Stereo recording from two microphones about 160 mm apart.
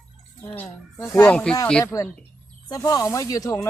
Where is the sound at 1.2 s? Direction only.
5° left (ahead or behind).